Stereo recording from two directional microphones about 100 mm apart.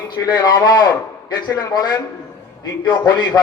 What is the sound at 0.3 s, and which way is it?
A man's voice, 40° left (ahead or behind).